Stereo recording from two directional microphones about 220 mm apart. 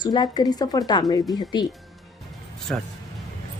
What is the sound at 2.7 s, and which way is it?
Speech, 5° left (ahead or behind).